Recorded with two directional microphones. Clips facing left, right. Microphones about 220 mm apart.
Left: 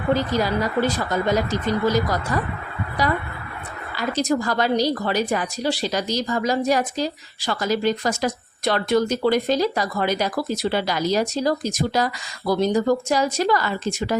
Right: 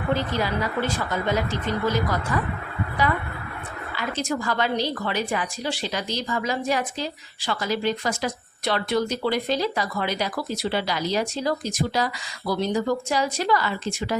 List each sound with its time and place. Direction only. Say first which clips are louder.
0.1 s speech: left 4 dB; 40° left (ahead or behind)
3.9 s a woman's voice: left 6 dB; 40° left (ahead or behind)